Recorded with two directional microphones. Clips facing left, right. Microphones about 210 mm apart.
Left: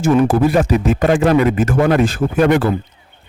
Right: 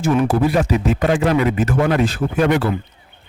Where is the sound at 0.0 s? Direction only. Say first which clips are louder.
Left 3 dB; 50° left (ahead or behind).